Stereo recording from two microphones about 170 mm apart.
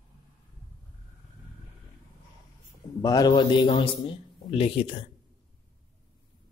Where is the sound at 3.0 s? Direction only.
20° left (ahead or behind).